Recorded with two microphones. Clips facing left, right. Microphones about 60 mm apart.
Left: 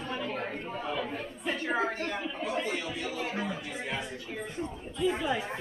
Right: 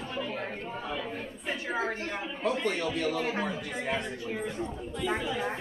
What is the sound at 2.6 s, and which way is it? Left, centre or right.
Speech, right.